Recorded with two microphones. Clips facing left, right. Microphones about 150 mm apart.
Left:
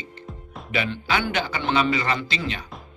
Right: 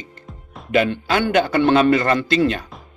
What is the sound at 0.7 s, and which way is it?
Speech, 45° right (ahead or behind).